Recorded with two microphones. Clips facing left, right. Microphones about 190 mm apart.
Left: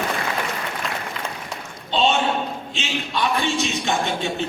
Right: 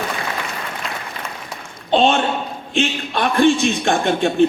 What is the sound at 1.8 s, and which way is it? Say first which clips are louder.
A man's voice: right 4 dB; 55° right (ahead or behind).